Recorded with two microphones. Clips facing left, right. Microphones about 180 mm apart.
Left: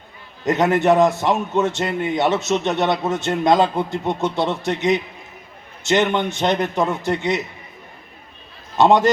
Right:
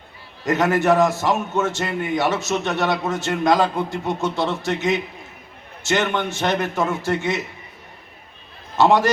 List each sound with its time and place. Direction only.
0.4 s a man's voice: 20° left (ahead or behind)
8.8 s a man's voice: 20° left (ahead or behind)